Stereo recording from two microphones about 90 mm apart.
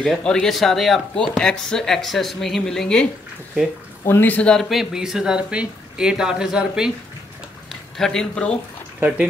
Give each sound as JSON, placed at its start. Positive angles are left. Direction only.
{"t": 0.2, "sound": "speech", "side_deg": 5}
{"t": 4.0, "sound": "speech", "side_deg": 25}
{"t": 4.6, "sound": "speech", "side_deg": -5}
{"t": 8.0, "sound": "speech", "side_deg": 5}